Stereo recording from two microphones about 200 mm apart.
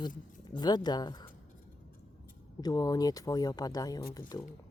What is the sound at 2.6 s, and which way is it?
Speech, 20° left (ahead or behind).